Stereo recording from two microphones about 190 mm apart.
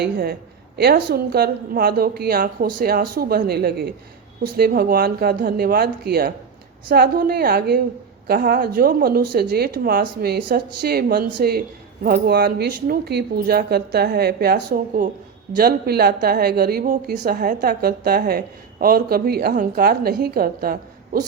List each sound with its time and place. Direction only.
0.0 s a woman's voice: 55° right (ahead or behind)